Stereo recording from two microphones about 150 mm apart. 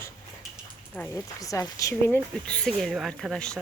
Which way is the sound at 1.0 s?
20° left (ahead or behind).